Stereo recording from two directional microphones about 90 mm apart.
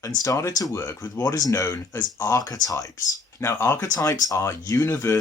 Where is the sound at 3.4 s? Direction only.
30° left (ahead or behind).